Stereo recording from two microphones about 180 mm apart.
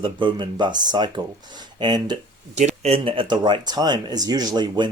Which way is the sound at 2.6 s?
35° right (ahead or behind).